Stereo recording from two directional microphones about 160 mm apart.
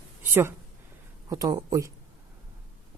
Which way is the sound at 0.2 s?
15° right (ahead or behind).